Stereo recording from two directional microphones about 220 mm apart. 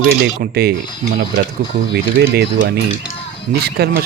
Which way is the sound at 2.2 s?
45° right (ahead or behind).